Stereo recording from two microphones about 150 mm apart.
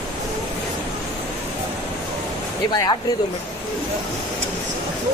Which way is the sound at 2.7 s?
30° left (ahead or behind).